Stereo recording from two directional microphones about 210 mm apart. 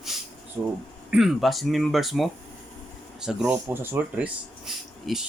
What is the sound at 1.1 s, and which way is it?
Speech, centre (ahead or behind).